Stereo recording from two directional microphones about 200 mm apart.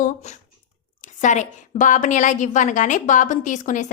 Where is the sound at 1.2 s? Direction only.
40° left (ahead or behind).